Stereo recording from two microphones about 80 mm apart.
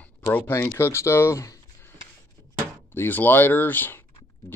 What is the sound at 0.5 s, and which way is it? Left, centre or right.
Speech, left.